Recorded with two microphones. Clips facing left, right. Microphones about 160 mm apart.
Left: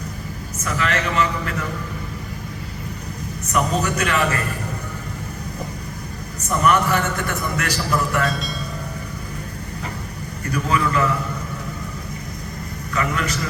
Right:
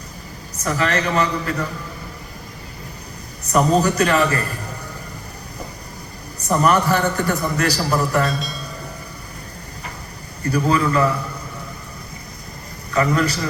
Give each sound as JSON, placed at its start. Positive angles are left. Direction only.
{"t": 0.5, "sound": "a man's voice", "side_deg": -35}
{"t": 3.4, "sound": "a man's voice", "side_deg": -35}
{"t": 6.5, "sound": "a man's voice", "side_deg": -35}
{"t": 8.3, "sound": "speech", "side_deg": 0}
{"t": 10.5, "sound": "a man's voice", "side_deg": -35}
{"t": 12.9, "sound": "a man's voice", "side_deg": -35}